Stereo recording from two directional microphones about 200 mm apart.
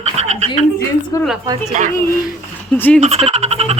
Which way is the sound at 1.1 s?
15° left (ahead or behind).